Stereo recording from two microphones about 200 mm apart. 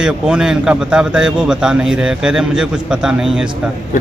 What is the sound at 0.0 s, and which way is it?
A man's voice, 5° right (ahead or behind).